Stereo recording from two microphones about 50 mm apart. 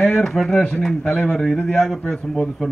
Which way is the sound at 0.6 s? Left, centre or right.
Left.